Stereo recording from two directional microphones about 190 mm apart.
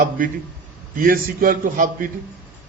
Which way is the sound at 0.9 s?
50° right (ahead or behind).